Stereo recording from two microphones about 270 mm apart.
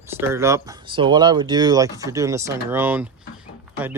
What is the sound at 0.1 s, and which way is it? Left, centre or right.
Speech, centre.